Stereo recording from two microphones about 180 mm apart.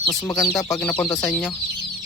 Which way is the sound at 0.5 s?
5° left (ahead or behind).